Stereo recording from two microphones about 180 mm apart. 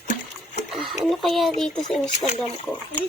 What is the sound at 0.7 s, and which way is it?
Speech, centre (ahead or behind).